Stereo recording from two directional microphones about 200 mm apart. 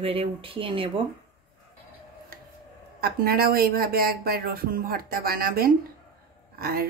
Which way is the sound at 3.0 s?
50° right (ahead or behind).